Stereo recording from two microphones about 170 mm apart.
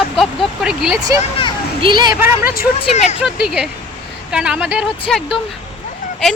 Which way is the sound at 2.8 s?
40° left (ahead or behind).